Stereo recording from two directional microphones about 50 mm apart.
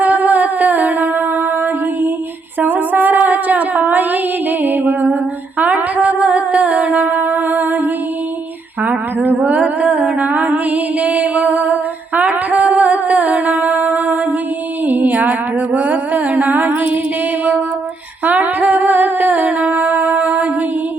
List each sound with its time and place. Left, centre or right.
0.0 s music: right
2.6 s a sound: right
5.5 s music: right
8.8 s a sound: right
14.8 s music: right
18.3 s music: right